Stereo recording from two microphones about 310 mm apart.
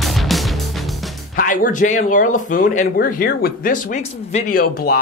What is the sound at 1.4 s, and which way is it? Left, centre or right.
Speech, left.